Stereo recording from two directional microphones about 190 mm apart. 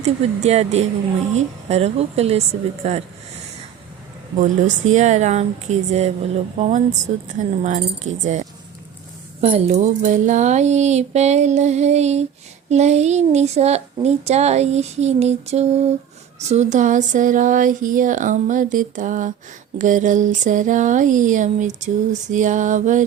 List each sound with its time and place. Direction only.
0.0 s a child's voice: 35° right (ahead or behind)
4.4 s a child's voice: 40° right (ahead or behind)